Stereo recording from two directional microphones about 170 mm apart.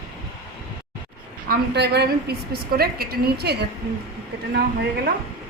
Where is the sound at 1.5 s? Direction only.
75° right (ahead or behind).